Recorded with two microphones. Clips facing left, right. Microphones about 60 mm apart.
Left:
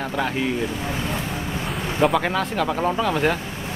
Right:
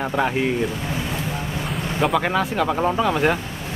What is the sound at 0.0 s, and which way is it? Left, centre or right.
Speech, centre.